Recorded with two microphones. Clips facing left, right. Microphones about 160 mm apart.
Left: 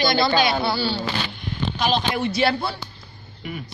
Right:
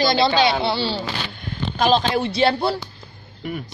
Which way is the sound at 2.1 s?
30° right (ahead or behind).